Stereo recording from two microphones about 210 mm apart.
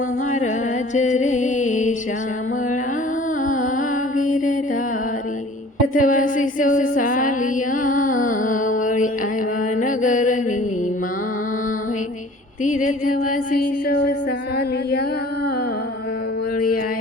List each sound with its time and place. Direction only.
0.3 s music: 35° left (ahead or behind)
3.4 s music: 40° left (ahead or behind)
5.9 s a sound: 40° left (ahead or behind)
9.7 s mantra: 40° left (ahead or behind)
12.6 s music: 35° left (ahead or behind)
16.6 s a sound: 40° left (ahead or behind)